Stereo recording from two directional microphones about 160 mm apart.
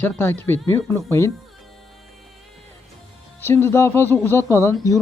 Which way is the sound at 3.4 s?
15° left (ahead or behind).